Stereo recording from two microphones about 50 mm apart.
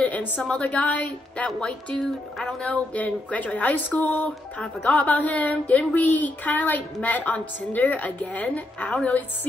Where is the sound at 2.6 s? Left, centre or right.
Left.